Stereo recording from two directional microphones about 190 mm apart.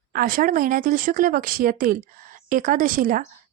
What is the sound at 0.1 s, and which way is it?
Speech, 50° right (ahead or behind).